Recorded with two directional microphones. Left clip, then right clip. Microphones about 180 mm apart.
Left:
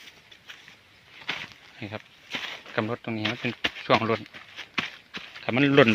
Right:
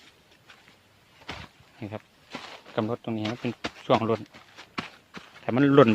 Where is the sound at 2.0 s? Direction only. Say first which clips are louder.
Left 6 dB; 5° right (ahead or behind).